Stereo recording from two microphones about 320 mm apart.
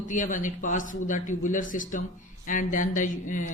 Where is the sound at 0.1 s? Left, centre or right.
Left.